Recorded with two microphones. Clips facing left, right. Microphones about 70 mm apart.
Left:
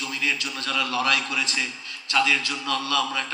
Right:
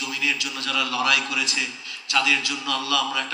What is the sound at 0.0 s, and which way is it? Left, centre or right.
A man's voice, left.